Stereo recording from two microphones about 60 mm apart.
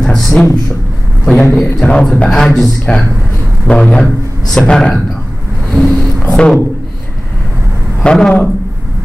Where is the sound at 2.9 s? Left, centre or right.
Centre.